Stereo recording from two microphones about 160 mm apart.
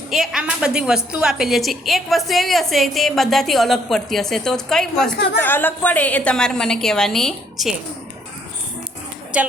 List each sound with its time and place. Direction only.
0.1 s a woman's voice: centre (ahead or behind)
5.1 s a woman's voice: 90° left
5.4 s a woman's voice: 10° left (ahead or behind)
9.3 s a woman's voice: 5° right (ahead or behind)